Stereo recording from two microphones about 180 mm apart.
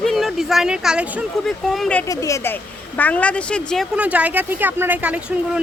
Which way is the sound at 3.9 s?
5° right (ahead or behind).